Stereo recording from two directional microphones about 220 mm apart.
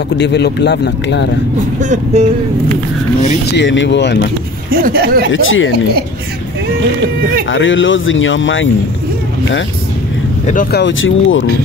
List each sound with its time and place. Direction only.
0.2 s speech: 50° left (ahead or behind)
1.8 s speech: 35° right (ahead or behind)
3.5 s speech: 55° left (ahead or behind)
4.6 s speech: 40° right (ahead or behind)
5.3 s speech: 60° left (ahead or behind)
7.5 s speech: 60° left (ahead or behind)
10.4 s speech: 40° left (ahead or behind); by 11.4 s 60° left (ahead or behind)